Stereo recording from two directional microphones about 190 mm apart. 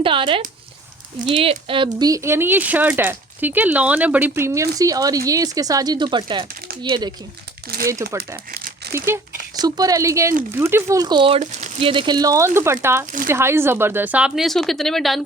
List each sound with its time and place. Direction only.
0.0 s speech: 25° right (ahead or behind)
7.6 s speech: 55° right (ahead or behind)
8.0 s speech: 15° right (ahead or behind)
8.4 s crumpling: 50° right (ahead or behind)
9.6 s speech: 20° right (ahead or behind); by 15.2 s centre (ahead or behind)